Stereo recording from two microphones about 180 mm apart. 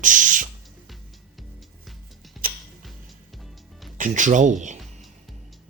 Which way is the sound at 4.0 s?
45° right (ahead or behind).